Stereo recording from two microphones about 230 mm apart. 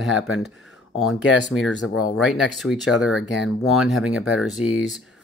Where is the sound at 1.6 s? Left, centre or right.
Left.